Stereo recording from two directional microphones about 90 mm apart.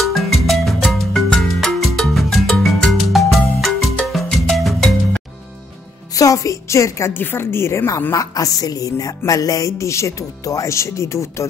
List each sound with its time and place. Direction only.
0.0 s music: centre (ahead or behind)
6.1 s a woman's voice: 40° left (ahead or behind)